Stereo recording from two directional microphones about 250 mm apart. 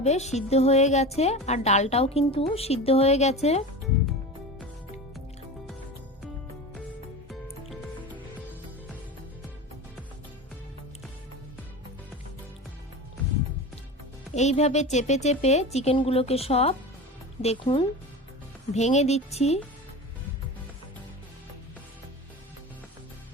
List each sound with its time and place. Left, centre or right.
0.0 s a woman's voice: left
7.7 s music: centre
14.3 s a woman's voice: left